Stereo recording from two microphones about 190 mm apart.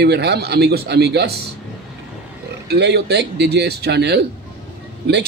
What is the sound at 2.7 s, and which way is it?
A man's voice, 60° right (ahead or behind).